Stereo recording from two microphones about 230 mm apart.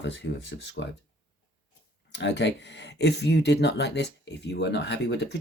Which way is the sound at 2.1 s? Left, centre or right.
Left.